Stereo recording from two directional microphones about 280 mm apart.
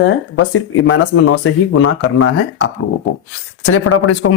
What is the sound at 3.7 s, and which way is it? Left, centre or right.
Speech, left.